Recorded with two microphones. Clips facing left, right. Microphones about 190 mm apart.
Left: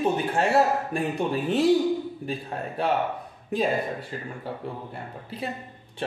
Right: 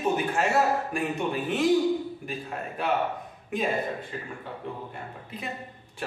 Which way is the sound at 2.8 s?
30° left (ahead or behind).